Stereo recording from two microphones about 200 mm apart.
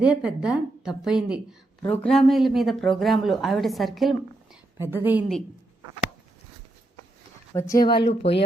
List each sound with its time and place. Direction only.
0.0 s a woman's voice: 5° right (ahead or behind)
4.8 s a woman's voice: 10° right (ahead or behind)
7.5 s speech: 15° left (ahead or behind)
7.9 s speech: 25° left (ahead or behind)